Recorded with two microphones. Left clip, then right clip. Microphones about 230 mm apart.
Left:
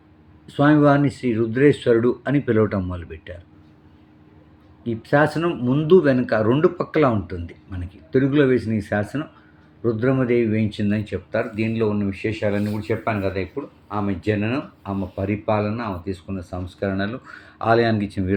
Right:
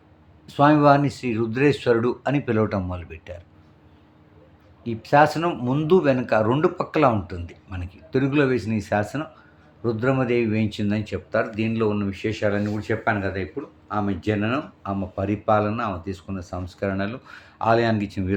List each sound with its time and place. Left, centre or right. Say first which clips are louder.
0.4 s speech: even; centre
4.9 s speech: right 2 dB; centre